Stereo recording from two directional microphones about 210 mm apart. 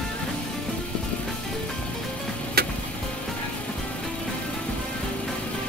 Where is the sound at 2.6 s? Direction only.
50° right (ahead or behind).